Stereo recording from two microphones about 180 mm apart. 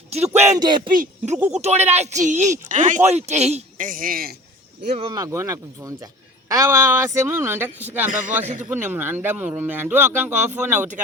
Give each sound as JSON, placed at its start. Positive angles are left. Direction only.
{"t": 0.1, "sound": "a sound", "side_deg": -35}
{"t": 0.9, "sound": "speech", "side_deg": -40}
{"t": 1.4, "sound": "speech", "side_deg": -5}
{"t": 1.6, "sound": "a man's voice", "side_deg": -40}
{"t": 5.1, "sound": "speech", "side_deg": -15}
{"t": 8.1, "sound": "a man's voice", "side_deg": -45}
{"t": 8.7, "sound": "speech", "side_deg": -10}